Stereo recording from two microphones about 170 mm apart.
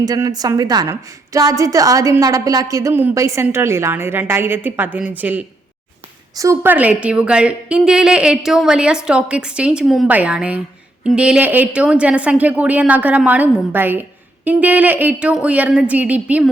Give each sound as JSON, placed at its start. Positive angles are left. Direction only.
{"t": 0.0, "sound": "a woman's voice", "side_deg": -25}